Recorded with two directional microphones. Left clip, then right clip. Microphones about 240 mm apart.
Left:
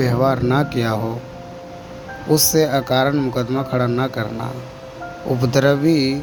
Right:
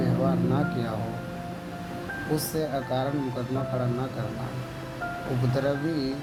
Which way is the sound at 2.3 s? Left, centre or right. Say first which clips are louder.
Left 14 dB; left.